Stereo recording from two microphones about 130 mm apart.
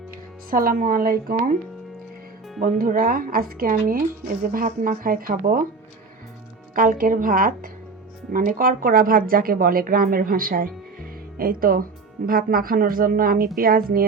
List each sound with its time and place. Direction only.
0.5 s speech: 90° right
2.6 s speech: 90° right
6.7 s speech: 90° right